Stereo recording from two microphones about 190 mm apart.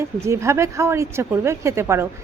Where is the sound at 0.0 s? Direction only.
15° right (ahead or behind).